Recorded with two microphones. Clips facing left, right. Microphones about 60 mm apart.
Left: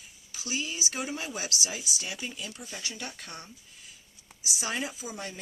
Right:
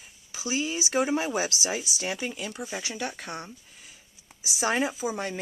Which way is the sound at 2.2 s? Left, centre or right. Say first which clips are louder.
Right 5 dB; right.